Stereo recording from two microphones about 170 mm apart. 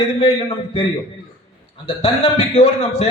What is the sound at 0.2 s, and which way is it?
Speech, 35° left (ahead or behind).